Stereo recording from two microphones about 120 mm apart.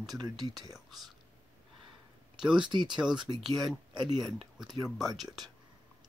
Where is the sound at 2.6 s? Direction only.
40° right (ahead or behind).